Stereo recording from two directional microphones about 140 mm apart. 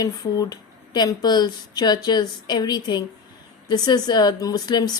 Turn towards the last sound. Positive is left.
turn(degrees=30)  # may be behind; listen again after turning